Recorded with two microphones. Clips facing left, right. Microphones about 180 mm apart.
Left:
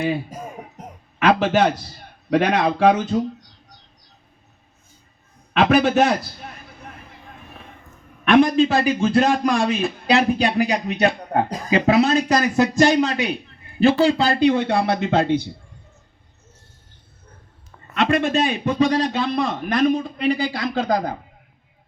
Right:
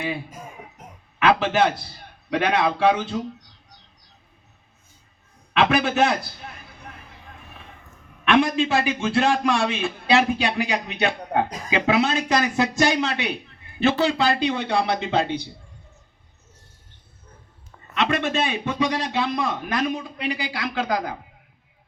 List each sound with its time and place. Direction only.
0.0 s a man's voice: 35° left (ahead or behind)
5.5 s a man's voice: 40° left (ahead or behind)
8.2 s a man's voice: 40° left (ahead or behind)
17.9 s a sound: 50° left (ahead or behind)
18.2 s a man's voice: 40° left (ahead or behind)
19.1 s a man's voice: 30° left (ahead or behind)
20.2 s a man's voice: 50° left (ahead or behind)